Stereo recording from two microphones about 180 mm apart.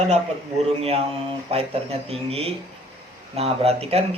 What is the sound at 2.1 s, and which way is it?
Speech, 35° right (ahead or behind).